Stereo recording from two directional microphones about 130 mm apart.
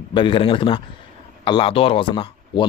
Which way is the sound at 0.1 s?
40° left (ahead or behind).